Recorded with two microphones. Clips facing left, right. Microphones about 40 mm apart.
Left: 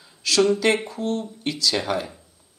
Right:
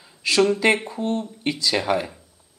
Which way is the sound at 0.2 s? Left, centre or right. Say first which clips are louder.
Right 1 dB; right.